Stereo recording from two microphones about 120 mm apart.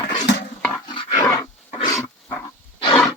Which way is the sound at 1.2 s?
25° left (ahead or behind).